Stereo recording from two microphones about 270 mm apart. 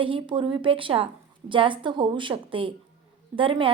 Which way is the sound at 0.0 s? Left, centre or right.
Centre.